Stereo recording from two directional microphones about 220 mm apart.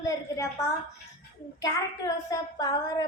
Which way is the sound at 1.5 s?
15° left (ahead or behind).